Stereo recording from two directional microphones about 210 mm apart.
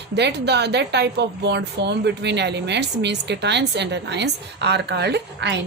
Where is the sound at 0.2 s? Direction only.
55° right (ahead or behind).